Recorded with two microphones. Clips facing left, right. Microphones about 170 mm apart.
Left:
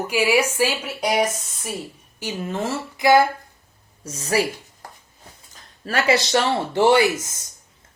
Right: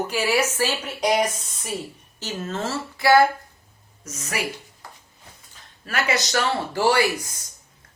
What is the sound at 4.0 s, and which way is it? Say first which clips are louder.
Speech: left 9 dB; 30° left (ahead or behind).